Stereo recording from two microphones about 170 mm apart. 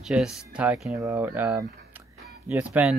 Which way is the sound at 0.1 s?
5° right (ahead or behind).